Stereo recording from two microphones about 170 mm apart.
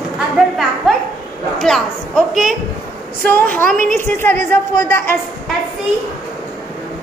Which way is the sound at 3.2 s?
10° left (ahead or behind).